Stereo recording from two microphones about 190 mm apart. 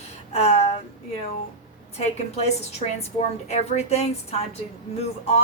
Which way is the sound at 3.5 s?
35° left (ahead or behind).